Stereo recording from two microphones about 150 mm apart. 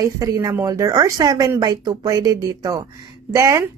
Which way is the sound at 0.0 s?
20° right (ahead or behind).